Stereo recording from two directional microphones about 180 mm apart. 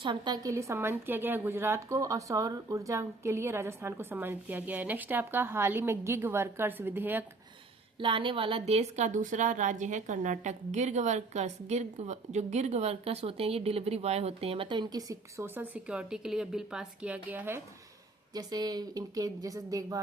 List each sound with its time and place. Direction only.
0.0 s a woman's voice: 25° right (ahead or behind)
7.9 s a woman's voice: 30° right (ahead or behind); by 17.6 s 10° right (ahead or behind)
18.3 s speech: 20° right (ahead or behind)